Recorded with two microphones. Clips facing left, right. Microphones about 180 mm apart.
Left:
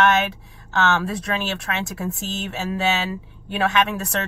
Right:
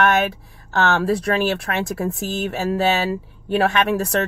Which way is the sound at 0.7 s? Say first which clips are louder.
Right 3 dB; 50° right (ahead or behind).